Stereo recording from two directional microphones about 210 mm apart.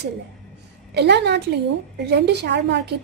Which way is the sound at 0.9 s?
55° right (ahead or behind).